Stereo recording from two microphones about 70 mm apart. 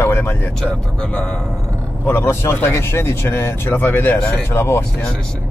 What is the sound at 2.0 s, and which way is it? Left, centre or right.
Speech, left.